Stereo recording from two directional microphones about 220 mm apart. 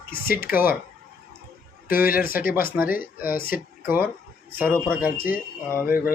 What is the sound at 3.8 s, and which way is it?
Speech, 10° right (ahead or behind).